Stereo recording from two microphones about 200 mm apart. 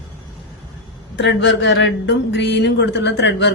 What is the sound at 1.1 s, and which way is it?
Speech, 60° left (ahead or behind).